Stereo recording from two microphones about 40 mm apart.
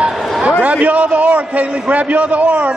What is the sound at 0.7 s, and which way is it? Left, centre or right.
A man's voice, right.